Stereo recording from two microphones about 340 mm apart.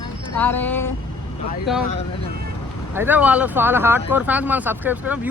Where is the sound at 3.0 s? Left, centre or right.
Centre.